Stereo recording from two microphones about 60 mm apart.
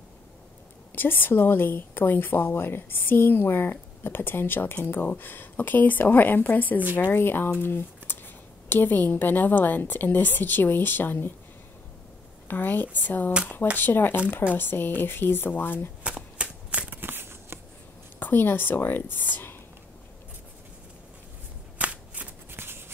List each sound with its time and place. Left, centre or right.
0.9 s a woman's voice: left
7.6 s a sound: left
8.6 s a woman's voice: left
12.4 s a woman's voice: left
16.0 s shuffling cards: centre
17.0 s shuffling cards: right
18.2 s a woman's voice: left
19.3 s whispering: left
21.7 s shuffling cards: right
22.5 s shuffling cards: right